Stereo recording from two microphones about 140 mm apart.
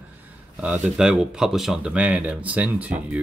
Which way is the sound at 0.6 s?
10° right (ahead or behind).